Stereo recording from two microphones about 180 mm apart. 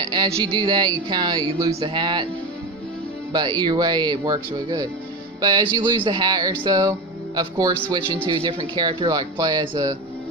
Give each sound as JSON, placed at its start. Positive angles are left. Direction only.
{"t": 0.0, "sound": "speech", "side_deg": -25}
{"t": 3.3, "sound": "speech", "side_deg": -25}
{"t": 8.3, "sound": "speech", "side_deg": -25}